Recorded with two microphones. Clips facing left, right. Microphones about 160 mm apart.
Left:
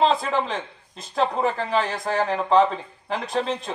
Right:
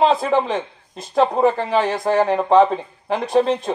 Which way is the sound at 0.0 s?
50° right (ahead or behind).